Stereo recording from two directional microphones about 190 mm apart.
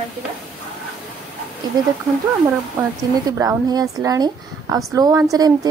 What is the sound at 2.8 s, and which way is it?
A woman's voice, 15° right (ahead or behind).